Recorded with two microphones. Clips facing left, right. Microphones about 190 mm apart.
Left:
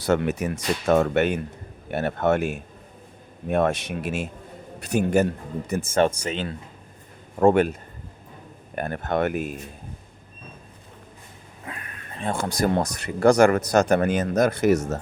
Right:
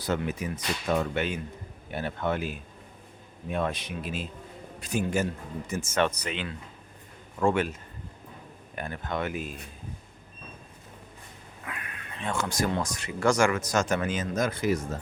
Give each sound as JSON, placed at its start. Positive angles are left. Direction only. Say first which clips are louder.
{"t": 0.0, "sound": "speech", "louder": "left 7 dB", "side_deg": 70}
{"t": 4.9, "sound": "speech", "louder": "left 7 dB", "side_deg": 60}
{"t": 5.9, "sound": "speech", "louder": "left 6 dB", "side_deg": 30}
{"t": 7.3, "sound": "a man's voice", "louder": "left 8 dB", "side_deg": 50}
{"t": 11.6, "sound": "a sound", "louder": "left 2 dB", "side_deg": 35}
{"t": 12.6, "sound": "speech", "louder": "left 6 dB", "side_deg": 55}